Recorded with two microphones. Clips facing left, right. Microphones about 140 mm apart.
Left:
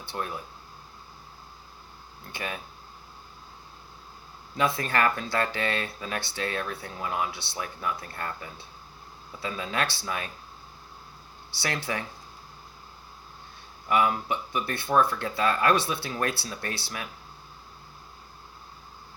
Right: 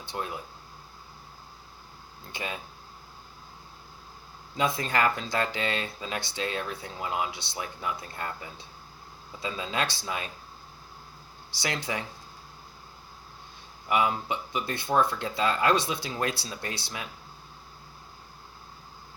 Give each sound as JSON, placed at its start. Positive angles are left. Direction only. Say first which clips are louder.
{"t": 0.0, "sound": "speech", "louder": "left 1 dB", "side_deg": -20}
{"t": 2.3, "sound": "speech", "louder": "left 1 dB", "side_deg": -20}
{"t": 4.5, "sound": "speech", "louder": "left 1 dB", "side_deg": -20}
{"t": 11.5, "sound": "speech", "louder": "left 1 dB", "side_deg": -15}
{"t": 13.8, "sound": "speech", "louder": "left 2 dB", "side_deg": -20}